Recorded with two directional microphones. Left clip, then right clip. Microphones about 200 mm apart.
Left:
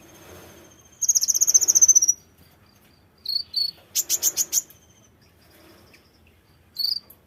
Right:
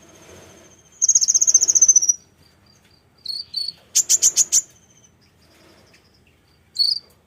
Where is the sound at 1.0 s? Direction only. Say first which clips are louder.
Right 4 dB; 15° left (ahead or behind).